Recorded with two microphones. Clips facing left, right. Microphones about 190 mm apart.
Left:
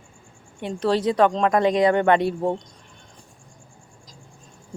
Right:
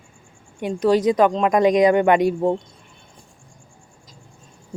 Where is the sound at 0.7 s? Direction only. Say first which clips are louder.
Right 4 dB; 10° right (ahead or behind).